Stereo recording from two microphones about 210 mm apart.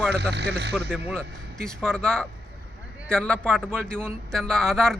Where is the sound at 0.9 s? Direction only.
10° right (ahead or behind).